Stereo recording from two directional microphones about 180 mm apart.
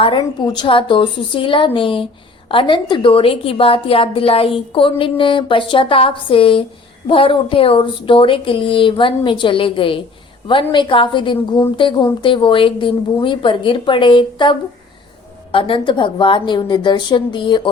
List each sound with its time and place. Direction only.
0.0 s a woman's voice: 25° left (ahead or behind)
15.5 s a woman's voice: 30° left (ahead or behind)